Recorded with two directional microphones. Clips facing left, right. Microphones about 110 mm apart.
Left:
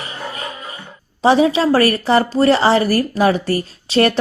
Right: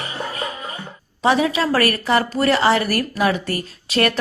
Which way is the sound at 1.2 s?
30° left (ahead or behind).